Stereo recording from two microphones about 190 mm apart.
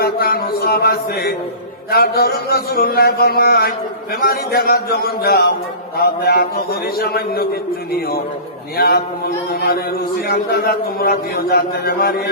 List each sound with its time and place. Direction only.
0.0 s a man's voice: 55° left (ahead or behind)
10.2 s a man's voice: 50° left (ahead or behind)